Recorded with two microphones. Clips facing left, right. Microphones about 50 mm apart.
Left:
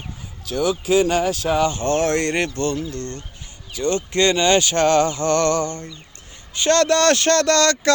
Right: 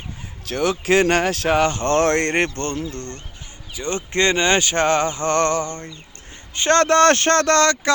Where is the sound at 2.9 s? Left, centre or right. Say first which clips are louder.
Left 2 dB; right.